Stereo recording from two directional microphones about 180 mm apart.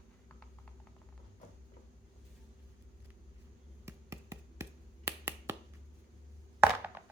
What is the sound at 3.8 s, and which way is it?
Finger snapping, 15° right (ahead or behind).